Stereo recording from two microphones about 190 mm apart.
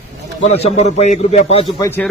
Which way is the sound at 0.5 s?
35° left (ahead or behind).